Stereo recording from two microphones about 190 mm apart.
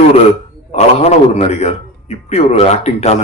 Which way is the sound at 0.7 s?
35° left (ahead or behind).